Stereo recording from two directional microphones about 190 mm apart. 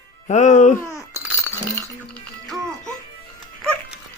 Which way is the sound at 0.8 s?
15° left (ahead or behind).